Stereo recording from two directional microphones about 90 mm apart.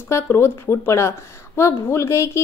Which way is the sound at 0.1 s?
25° left (ahead or behind).